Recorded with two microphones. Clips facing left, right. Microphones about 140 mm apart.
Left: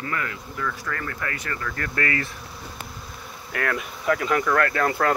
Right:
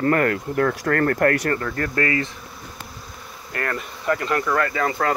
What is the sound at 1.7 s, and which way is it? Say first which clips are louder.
Speech: right 4 dB; 30° right (ahead or behind).